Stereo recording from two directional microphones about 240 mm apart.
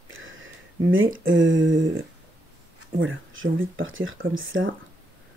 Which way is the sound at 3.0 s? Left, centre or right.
Right.